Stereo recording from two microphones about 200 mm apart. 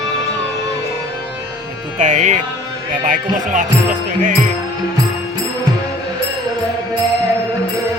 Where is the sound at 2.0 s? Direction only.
35° right (ahead or behind).